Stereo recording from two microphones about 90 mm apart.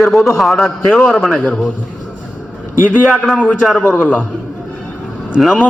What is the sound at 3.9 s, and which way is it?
Speech, 20° left (ahead or behind).